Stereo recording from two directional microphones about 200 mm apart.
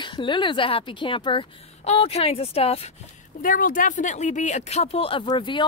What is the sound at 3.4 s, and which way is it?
Speech, 45° left (ahead or behind).